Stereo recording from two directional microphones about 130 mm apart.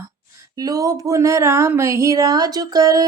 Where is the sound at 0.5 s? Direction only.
30° right (ahead or behind).